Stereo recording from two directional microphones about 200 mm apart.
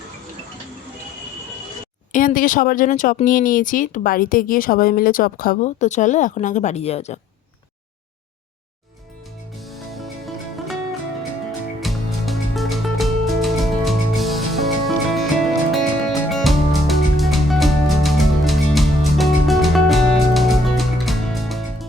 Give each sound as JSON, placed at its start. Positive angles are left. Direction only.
{"t": 2.1, "sound": "speech", "side_deg": 45}
{"t": 9.6, "sound": "music", "side_deg": 0}
{"t": 11.8, "sound": "music", "side_deg": 0}